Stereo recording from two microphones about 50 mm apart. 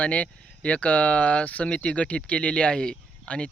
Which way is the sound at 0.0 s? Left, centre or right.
Left.